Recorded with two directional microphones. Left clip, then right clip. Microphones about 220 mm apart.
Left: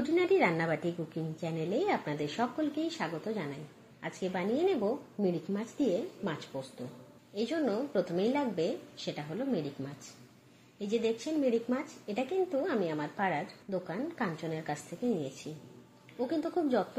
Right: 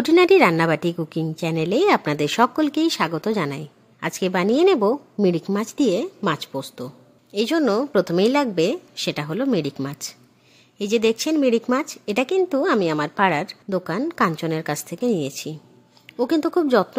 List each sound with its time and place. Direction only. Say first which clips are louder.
0.0 s a woman's voice: right 13 dB; 40° right (ahead or behind)
10.8 s speech: right 12 dB; 45° right (ahead or behind)
16.3 s speech: right 12 dB; 50° right (ahead or behind)